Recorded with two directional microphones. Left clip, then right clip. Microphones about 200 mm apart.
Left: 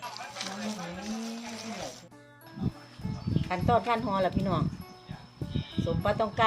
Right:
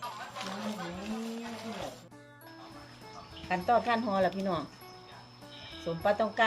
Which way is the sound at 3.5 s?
15° left (ahead or behind).